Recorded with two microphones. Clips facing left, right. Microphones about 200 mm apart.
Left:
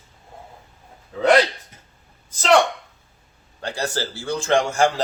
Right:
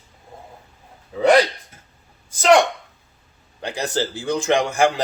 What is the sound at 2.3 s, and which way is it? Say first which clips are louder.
Speech: right 3 dB; 15° right (ahead or behind).